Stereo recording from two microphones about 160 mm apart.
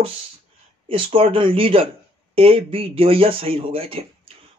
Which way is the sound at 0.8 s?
35° right (ahead or behind).